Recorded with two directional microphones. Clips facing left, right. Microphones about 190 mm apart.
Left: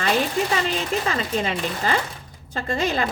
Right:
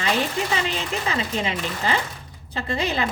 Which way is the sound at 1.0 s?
45° left (ahead or behind).